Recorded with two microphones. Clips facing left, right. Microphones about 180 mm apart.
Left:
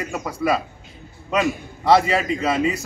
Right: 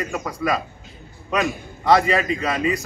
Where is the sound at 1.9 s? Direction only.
5° left (ahead or behind).